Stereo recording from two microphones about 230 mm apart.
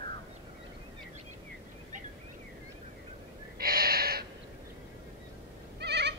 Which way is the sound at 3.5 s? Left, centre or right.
Right.